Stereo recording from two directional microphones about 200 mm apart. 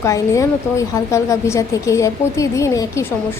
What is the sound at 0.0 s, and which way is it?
Speech, 15° left (ahead or behind).